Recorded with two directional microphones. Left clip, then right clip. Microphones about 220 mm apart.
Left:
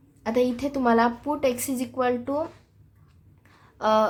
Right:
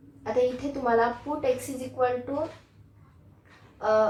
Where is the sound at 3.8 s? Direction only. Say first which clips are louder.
Left 2 dB; 40° left (ahead or behind).